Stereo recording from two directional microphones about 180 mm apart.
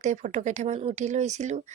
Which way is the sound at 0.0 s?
40° right (ahead or behind).